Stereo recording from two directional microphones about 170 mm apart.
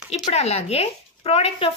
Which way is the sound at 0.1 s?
40° left (ahead or behind).